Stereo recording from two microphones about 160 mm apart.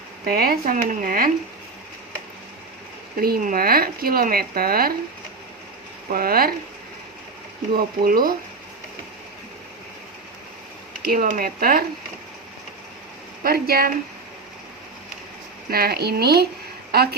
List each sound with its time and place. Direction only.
0.3 s speech: 70° right (ahead or behind)
3.2 s speech: 65° right (ahead or behind)
6.1 s speech: 65° right (ahead or behind)
7.7 s speech: 65° right (ahead or behind)
11.0 s speech: 60° right (ahead or behind)
13.4 s speech: 70° right (ahead or behind)
15.7 s speech: 75° right (ahead or behind)